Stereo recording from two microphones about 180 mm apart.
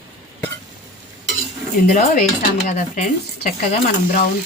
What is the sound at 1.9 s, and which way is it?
Speech, 40° left (ahead or behind).